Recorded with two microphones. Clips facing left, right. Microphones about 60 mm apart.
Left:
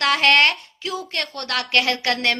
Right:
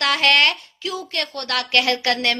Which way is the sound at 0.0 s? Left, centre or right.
Left.